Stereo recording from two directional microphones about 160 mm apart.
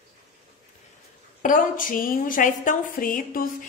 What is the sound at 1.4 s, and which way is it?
A woman's voice, 55° left (ahead or behind).